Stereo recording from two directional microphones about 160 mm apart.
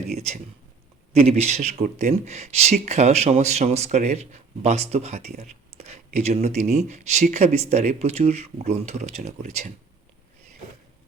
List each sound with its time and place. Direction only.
0.1 s speech: 45° right (ahead or behind)